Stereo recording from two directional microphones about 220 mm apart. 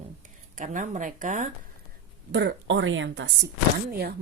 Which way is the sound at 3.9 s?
45° right (ahead or behind).